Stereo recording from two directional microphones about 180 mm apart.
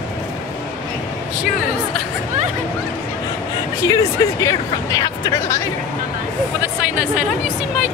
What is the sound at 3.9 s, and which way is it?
Speech, 20° left (ahead or behind).